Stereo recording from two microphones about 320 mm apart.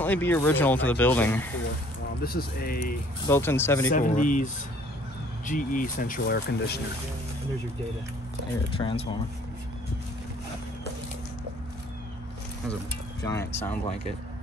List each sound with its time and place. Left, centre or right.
0.0 s speech: centre
2.2 s speech: left
3.3 s speech: centre
3.9 s speech: left
5.5 s speech: left
8.7 s speech: centre
13.2 s speech: centre